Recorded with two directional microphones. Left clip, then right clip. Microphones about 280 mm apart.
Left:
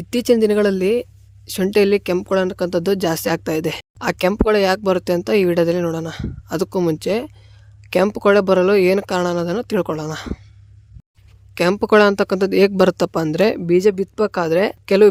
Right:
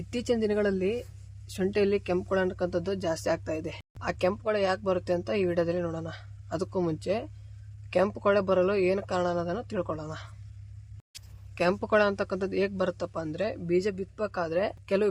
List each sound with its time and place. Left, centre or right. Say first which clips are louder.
0.1 s speech: left 13 dB; left
11.5 s speech: left 11 dB; left